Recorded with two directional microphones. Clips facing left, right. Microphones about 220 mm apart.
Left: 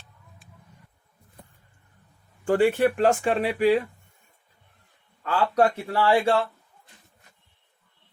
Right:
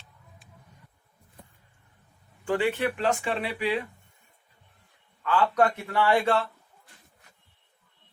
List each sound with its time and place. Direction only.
2.4 s speech: 45° left (ahead or behind)
5.2 s a man's voice: 35° left (ahead or behind)